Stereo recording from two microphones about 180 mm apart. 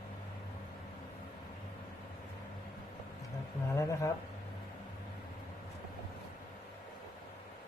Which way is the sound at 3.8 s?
15° left (ahead or behind).